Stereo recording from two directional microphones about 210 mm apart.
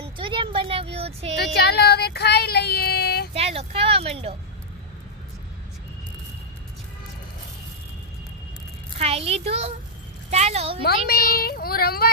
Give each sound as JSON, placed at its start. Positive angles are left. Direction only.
{"t": 0.0, "sound": "a sound", "side_deg": -25}
{"t": 1.5, "sound": "child singing", "side_deg": 50}
{"t": 3.3, "sound": "speech", "side_deg": -30}
{"t": 9.0, "sound": "a child's voice", "side_deg": -30}
{"t": 10.8, "sound": "speech", "side_deg": 45}